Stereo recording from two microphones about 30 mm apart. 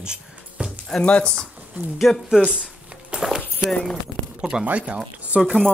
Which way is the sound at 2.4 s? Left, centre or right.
Right.